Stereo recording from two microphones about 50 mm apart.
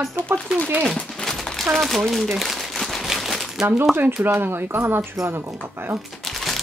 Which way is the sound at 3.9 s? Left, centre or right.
Right.